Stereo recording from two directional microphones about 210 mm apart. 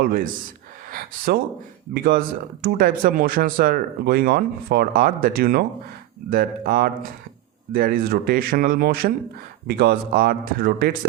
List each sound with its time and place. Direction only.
0.0 s speech: 45° right (ahead or behind)